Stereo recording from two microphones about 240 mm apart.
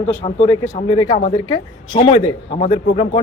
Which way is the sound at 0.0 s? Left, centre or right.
Left.